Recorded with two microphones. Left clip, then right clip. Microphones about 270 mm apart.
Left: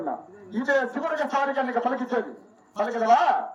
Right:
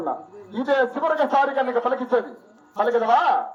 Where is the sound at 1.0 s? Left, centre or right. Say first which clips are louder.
Right 6 dB; centre.